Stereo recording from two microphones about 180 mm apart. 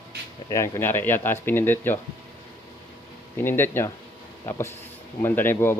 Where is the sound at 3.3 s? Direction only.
10° left (ahead or behind).